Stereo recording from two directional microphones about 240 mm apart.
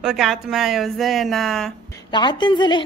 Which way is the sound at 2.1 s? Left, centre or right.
Centre.